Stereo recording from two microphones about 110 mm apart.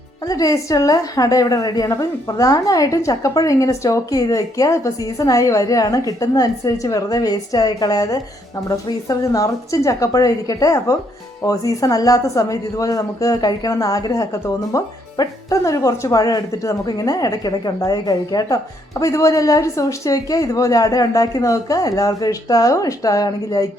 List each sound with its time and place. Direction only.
0.3 s speech: 30° left (ahead or behind)